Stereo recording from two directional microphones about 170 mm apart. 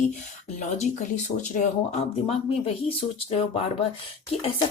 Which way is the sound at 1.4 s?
40° left (ahead or behind).